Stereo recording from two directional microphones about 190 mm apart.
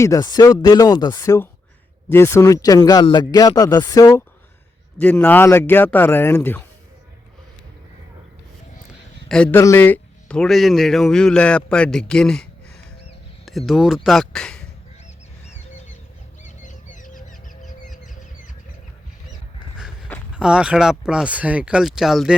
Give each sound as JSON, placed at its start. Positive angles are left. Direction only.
{"t": 0.0, "sound": "speech", "side_deg": 20}
{"t": 4.9, "sound": "speech", "side_deg": 10}
{"t": 9.3, "sound": "speech", "side_deg": 10}
{"t": 16.4, "sound": "bird", "side_deg": 40}
{"t": 19.7, "sound": "a sound", "side_deg": -5}
{"t": 20.3, "sound": "speech", "side_deg": -5}